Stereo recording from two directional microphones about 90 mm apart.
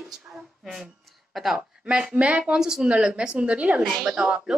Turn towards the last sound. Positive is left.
turn(degrees=-10)  # may be behind; listen again after turning